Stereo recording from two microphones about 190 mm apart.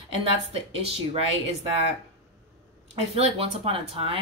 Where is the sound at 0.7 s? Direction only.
30° right (ahead or behind).